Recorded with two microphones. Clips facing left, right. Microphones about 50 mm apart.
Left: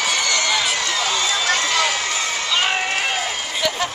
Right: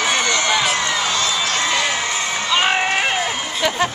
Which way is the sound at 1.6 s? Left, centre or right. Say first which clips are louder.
Right 1 dB; right.